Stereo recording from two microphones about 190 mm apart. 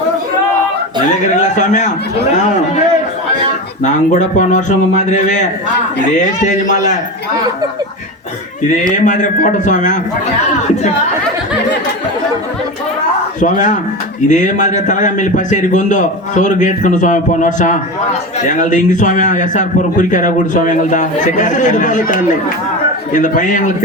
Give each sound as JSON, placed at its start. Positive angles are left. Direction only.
{"t": 1.1, "sound": "a man's voice", "side_deg": 40}
{"t": 3.8, "sound": "a man's voice", "side_deg": 40}
{"t": 9.0, "sound": "a man's voice", "side_deg": 40}
{"t": 13.4, "sound": "a man's voice", "side_deg": 40}